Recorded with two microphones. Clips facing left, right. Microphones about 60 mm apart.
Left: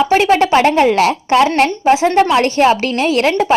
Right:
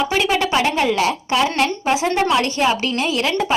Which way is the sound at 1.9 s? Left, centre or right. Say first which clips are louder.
Left 8 dB; left.